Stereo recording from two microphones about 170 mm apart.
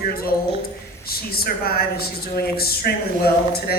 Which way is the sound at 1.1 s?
60° left (ahead or behind).